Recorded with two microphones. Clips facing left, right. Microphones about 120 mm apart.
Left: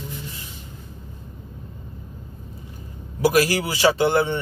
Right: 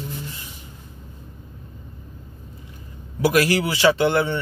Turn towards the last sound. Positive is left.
turn(degrees=35)  # may be behind; listen again after turning